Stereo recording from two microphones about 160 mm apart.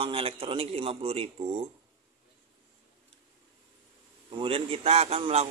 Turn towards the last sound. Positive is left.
turn(degrees=-40)  # may be behind; listen again after turning